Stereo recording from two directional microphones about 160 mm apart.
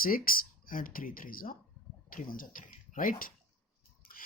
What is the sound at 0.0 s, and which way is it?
Speech, 65° left (ahead or behind).